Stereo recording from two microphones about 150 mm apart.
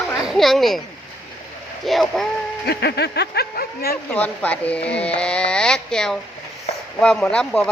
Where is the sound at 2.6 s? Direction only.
90° left.